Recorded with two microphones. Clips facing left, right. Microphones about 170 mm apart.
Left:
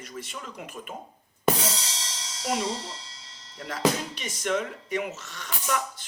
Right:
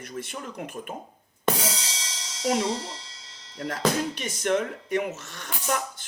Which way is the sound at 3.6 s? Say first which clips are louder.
Right 1 dB; 50° right (ahead or behind).